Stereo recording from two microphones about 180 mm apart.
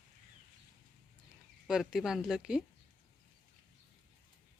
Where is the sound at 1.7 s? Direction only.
5° right (ahead or behind).